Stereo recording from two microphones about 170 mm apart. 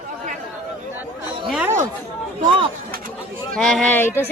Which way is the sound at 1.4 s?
Centre (ahead or behind).